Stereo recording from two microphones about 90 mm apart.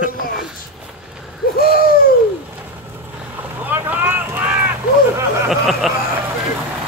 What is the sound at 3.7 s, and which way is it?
Vehicle, 20° right (ahead or behind).